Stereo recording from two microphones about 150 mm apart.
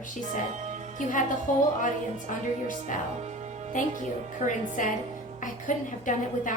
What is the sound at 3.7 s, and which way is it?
A woman's voice, 60° left (ahead or behind).